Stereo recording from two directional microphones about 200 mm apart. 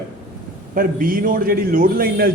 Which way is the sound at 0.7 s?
45° right (ahead or behind).